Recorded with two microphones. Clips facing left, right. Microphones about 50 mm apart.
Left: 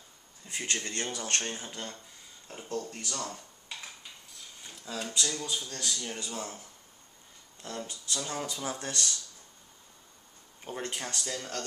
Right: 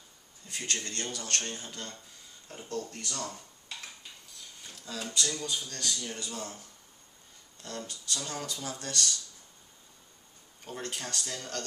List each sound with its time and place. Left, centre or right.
0.5 s speech: centre
3.1 s speech: centre
4.9 s speech: centre
6.0 s speech: left
10.6 s speech: left